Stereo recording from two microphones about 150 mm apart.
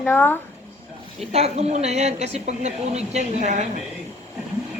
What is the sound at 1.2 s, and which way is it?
A woman's voice, 45° right (ahead or behind).